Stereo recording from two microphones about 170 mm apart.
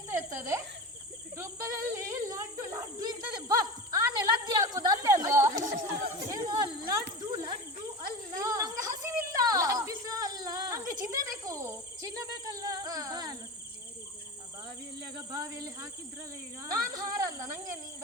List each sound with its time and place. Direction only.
0.1 s cricket: 15° right (ahead or behind)
1.4 s snake: 20° right (ahead or behind)
5.2 s chatter: 20° right (ahead or behind)
5.5 s chatter: 50° right (ahead or behind)
6.3 s a sound: 25° right (ahead or behind)
7.2 s snake: 25° right (ahead or behind)
8.3 s a sound: 20° right (ahead or behind)
15.1 s snake: 20° right (ahead or behind)
16.9 s a sound: 20° right (ahead or behind)